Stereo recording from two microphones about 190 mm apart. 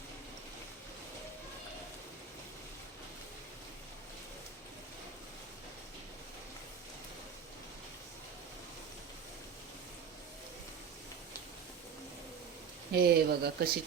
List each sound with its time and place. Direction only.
12.9 s speech: 55° right (ahead or behind)